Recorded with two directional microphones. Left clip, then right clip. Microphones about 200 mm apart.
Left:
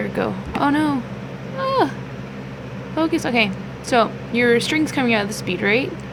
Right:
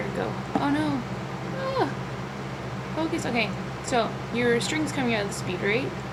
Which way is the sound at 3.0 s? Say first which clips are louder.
Left 8 dB; 40° left (ahead or behind).